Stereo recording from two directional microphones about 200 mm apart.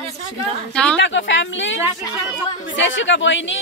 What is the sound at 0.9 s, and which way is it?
Speech, 65° left (ahead or behind).